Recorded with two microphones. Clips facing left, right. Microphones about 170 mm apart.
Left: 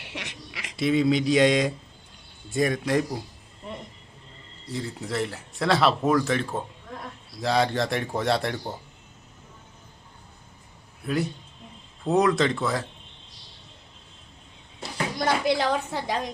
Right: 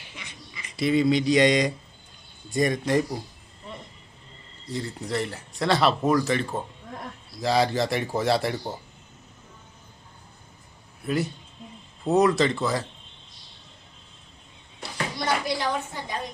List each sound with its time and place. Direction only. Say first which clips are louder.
0.0 s a sound: left 6 dB; 80° left
0.8 s speech: even; centre (ahead or behind)
4.7 s speech: right 1 dB; centre (ahead or behind)
11.0 s speech: even; centre (ahead or behind)
14.8 s a sound: left 2 dB; 50° left (ahead or behind)
15.5 s a woman's voice: left 3 dB; 85° left